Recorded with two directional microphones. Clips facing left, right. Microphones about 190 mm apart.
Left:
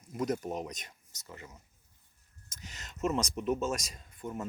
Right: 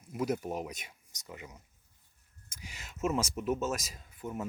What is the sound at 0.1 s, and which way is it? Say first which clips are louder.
Speech: even; 5° right (ahead or behind).